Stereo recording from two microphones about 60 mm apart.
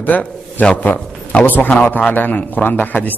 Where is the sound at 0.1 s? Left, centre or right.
Left.